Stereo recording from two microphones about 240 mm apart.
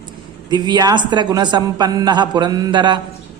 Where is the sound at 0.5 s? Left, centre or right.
Centre.